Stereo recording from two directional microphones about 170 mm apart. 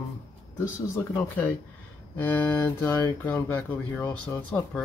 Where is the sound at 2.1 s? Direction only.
10° left (ahead or behind).